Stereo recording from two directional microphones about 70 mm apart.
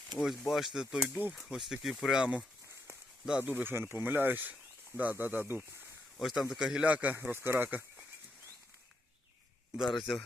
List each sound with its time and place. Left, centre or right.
0.2 s speech: centre
3.4 s speech: right
6.1 s speech: centre; by 7.9 s right
9.8 s speech: centre